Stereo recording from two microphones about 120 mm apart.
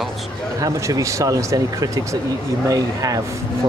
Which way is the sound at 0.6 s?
30° right (ahead or behind).